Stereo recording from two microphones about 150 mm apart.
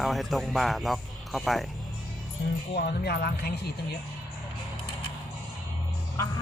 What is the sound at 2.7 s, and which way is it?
Speech, 90° left.